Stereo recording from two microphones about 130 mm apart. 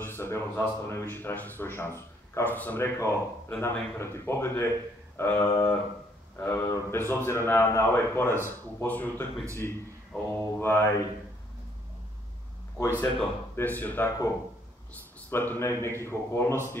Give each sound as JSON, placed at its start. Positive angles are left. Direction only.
{"t": 0.0, "sound": "a man's voice", "side_deg": 20}
{"t": 13.0, "sound": "speech", "side_deg": 15}
{"t": 15.2, "sound": "a man's voice", "side_deg": 15}